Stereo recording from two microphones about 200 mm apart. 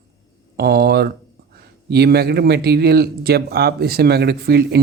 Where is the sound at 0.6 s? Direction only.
50° right (ahead or behind).